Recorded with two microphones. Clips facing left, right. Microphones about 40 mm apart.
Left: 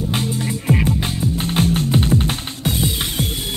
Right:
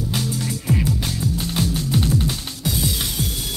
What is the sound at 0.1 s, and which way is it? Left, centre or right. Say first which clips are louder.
Music: left 3 dB; left.